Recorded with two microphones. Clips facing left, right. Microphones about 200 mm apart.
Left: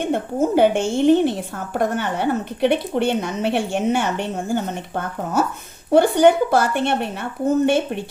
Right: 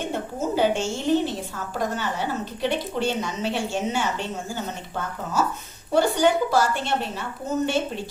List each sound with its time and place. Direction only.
0.0 s a woman's voice: 55° left (ahead or behind)